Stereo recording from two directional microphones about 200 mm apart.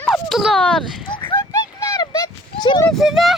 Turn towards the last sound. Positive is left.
turn(degrees=0)  # may be behind; listen again after turning